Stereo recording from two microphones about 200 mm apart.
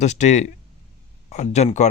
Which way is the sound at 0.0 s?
35° left (ahead or behind).